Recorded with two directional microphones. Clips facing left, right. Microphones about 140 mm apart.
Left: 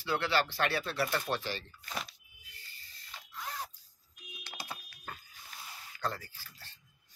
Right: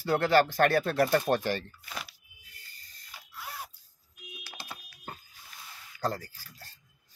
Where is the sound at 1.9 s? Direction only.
5° right (ahead or behind).